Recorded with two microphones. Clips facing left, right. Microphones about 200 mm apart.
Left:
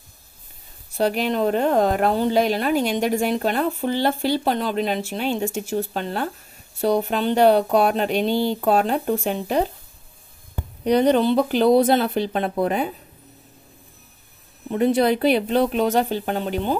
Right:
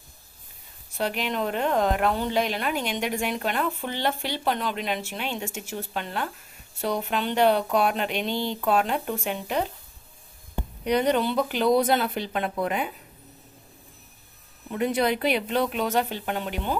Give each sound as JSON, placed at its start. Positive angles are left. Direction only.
{"t": 0.9, "sound": "a woman's voice", "side_deg": 35}
{"t": 10.8, "sound": "a woman's voice", "side_deg": 35}
{"t": 14.7, "sound": "a woman's voice", "side_deg": 30}